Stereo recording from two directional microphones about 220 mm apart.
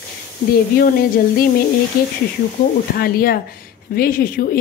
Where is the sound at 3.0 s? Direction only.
40° left (ahead or behind).